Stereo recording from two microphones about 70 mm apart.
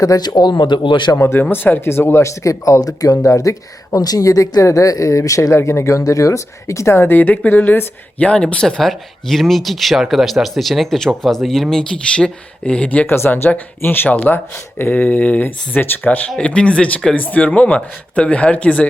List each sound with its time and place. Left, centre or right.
0.2 s speech: left
1.1 s speech: left
5.5 s speech: left
7.2 s speech: left
8.3 s speech: centre
13.1 s speech: left
16.4 s speech: centre